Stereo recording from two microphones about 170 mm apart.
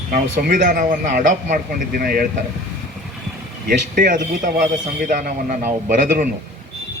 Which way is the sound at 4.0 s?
50° right (ahead or behind).